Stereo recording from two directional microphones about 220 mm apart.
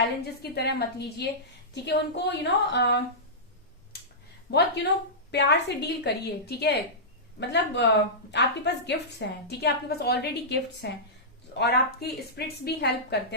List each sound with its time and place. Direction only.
0.5 s a woman's voice: 50° left (ahead or behind)
4.5 s a woman's voice: 50° left (ahead or behind)